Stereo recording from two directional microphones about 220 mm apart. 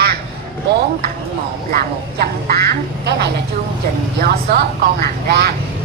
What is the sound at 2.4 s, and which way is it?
Speech, 45° right (ahead or behind).